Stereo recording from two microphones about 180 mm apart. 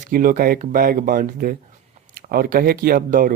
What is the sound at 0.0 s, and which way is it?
Speech, 50° right (ahead or behind).